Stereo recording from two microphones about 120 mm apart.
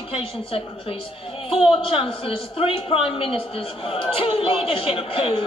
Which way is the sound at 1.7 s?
50° left (ahead or behind).